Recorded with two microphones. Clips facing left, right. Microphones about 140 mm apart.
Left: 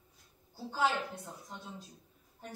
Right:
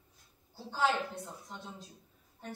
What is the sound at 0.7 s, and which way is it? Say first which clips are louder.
Speech: right 1 dB; 5° left (ahead or behind).